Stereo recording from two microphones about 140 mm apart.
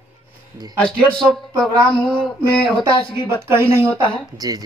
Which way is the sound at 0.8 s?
5° left (ahead or behind).